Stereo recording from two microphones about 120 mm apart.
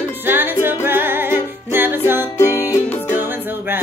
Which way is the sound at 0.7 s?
20° right (ahead or behind).